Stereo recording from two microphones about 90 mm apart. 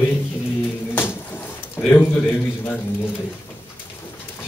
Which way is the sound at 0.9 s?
25° left (ahead or behind).